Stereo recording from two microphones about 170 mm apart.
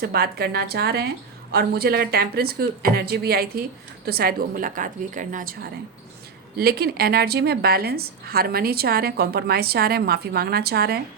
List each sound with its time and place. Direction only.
0.0 s a woman's voice: 65° right (ahead or behind); by 5.5 s 50° right (ahead or behind)
6.6 s a woman's voice: 65° right (ahead or behind)